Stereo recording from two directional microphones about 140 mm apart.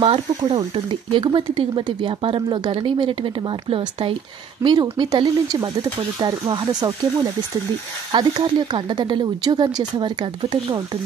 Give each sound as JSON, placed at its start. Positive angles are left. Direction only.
{"t": 0.0, "sound": "speech", "side_deg": -40}
{"t": 4.6, "sound": "speech", "side_deg": -20}
{"t": 4.9, "sound": "speech", "side_deg": -30}
{"t": 8.1, "sound": "speech", "side_deg": -30}